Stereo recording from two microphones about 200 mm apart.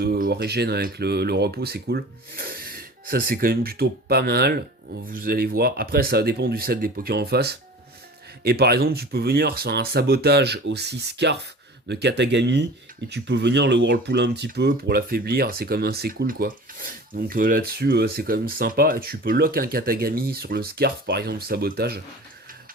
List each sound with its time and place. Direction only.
0.0 s speech: 50° right (ahead or behind)